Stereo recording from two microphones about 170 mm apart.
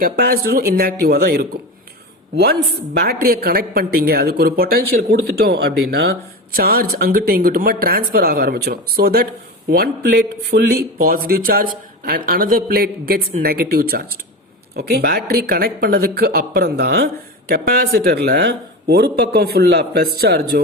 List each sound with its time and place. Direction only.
0.0 s speech: 65° right (ahead or behind)
5.4 s speech: 75° right (ahead or behind)
6.6 s speech: 60° right (ahead or behind); by 17.1 s 80° right
17.5 s speech: 65° right (ahead or behind)